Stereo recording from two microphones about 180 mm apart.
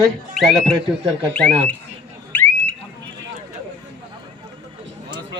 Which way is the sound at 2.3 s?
10° left (ahead or behind).